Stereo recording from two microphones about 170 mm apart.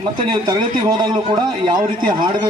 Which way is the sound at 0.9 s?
25° right (ahead or behind).